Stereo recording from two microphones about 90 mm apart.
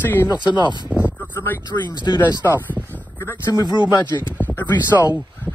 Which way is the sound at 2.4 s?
20° left (ahead or behind).